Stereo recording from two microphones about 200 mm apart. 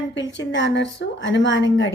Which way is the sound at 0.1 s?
65° left (ahead or behind).